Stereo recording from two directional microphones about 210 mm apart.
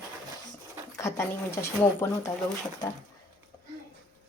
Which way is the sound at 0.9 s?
15° left (ahead or behind).